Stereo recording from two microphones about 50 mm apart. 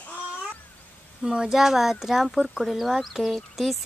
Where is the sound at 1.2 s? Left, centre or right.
Centre.